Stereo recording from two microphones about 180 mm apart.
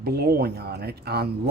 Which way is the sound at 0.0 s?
60° right (ahead or behind).